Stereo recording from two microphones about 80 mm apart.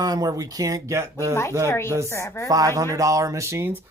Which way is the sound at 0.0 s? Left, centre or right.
Right.